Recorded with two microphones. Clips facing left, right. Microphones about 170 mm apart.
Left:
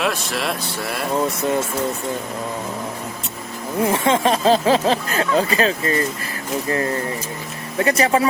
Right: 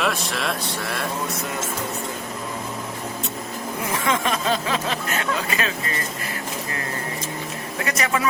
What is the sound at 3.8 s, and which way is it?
Speech, 30° left (ahead or behind).